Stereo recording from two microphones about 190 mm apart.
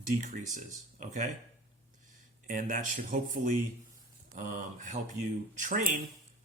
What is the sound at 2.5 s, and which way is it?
Speech, 45° right (ahead or behind).